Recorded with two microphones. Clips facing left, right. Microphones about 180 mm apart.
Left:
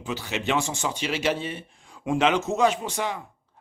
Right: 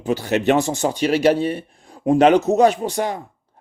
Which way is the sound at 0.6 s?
40° right (ahead or behind).